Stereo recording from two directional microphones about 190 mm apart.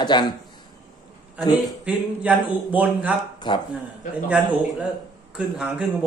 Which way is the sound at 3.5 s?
25° left (ahead or behind).